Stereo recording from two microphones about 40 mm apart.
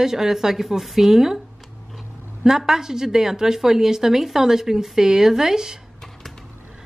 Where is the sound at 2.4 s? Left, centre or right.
Centre.